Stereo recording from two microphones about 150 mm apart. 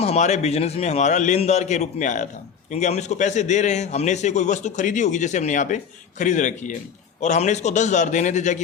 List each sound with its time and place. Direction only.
0.0 s a man's voice: 45° left (ahead or behind)